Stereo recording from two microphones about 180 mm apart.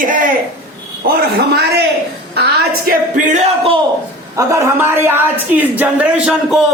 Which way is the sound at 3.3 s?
35° right (ahead or behind).